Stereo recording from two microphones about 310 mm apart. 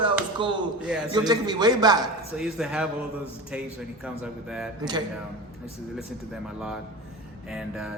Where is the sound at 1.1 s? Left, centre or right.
Centre.